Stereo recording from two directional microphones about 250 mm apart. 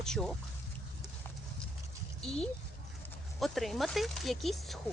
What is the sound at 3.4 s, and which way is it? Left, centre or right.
Speech, centre.